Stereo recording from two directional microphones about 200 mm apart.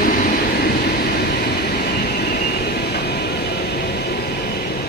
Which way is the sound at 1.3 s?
55° left (ahead or behind).